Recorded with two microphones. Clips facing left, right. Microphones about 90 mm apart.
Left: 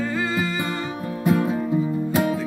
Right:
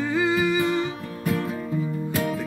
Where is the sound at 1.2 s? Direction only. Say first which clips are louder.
Left 6 dB; 20° left (ahead or behind).